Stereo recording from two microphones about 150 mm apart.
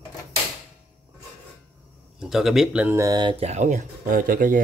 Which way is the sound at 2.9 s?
25° right (ahead or behind).